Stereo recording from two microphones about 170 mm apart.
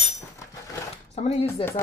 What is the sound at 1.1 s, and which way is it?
Speech, 35° left (ahead or behind).